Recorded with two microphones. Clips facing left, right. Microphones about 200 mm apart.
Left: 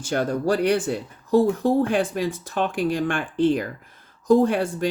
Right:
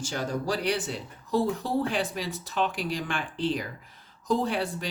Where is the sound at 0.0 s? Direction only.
55° left (ahead or behind).